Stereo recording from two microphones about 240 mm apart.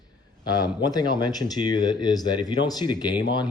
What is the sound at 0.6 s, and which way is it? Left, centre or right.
Speech, centre.